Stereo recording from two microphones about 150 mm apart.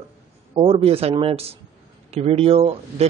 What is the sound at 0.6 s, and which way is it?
Speech, 40° right (ahead or behind).